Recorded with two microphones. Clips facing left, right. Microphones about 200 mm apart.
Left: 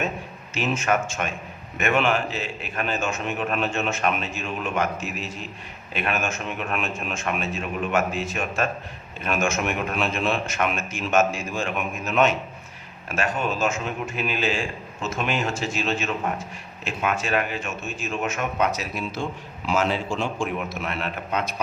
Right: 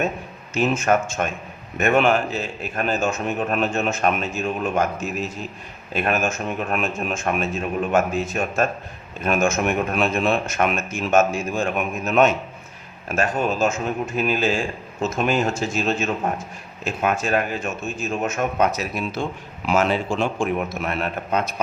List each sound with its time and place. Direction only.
0.5 s a man's voice: 45° right (ahead or behind)
19.6 s a man's voice: 60° right (ahead or behind)